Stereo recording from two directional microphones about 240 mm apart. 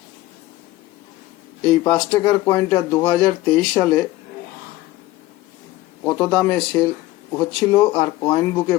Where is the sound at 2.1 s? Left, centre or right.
Centre.